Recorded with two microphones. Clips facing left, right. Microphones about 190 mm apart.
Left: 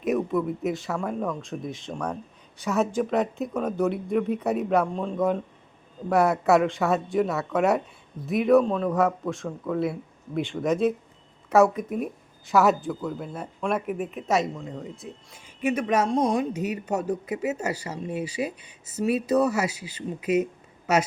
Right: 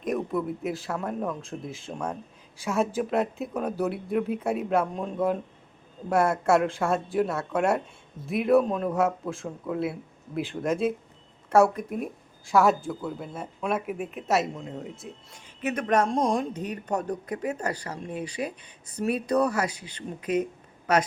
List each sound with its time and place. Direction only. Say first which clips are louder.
0.0 s speech: left 3 dB; centre (ahead or behind)
15.6 s speech: left 1 dB; 10° left (ahead or behind)